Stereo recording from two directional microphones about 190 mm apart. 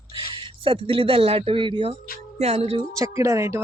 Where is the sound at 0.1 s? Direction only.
25° right (ahead or behind).